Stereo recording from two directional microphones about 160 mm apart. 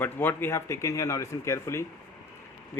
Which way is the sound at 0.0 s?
15° left (ahead or behind).